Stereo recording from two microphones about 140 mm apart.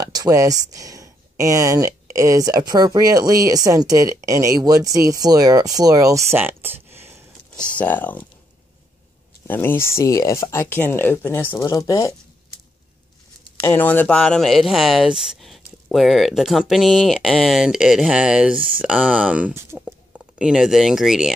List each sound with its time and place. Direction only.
0.0 s speech: 25° right (ahead or behind)
7.7 s speech: 10° left (ahead or behind)
9.5 s speech: 15° left (ahead or behind)
13.7 s speech: 15° left (ahead or behind); by 21.3 s 5° right (ahead or behind)